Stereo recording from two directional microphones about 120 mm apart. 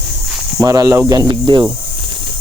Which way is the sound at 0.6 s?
30° right (ahead or behind).